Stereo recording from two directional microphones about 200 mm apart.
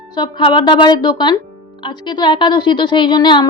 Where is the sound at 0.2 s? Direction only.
25° left (ahead or behind).